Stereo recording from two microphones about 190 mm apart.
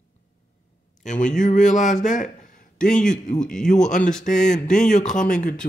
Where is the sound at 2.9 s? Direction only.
40° left (ahead or behind).